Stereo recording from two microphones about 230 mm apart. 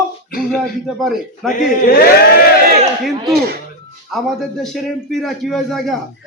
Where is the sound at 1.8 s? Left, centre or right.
Left.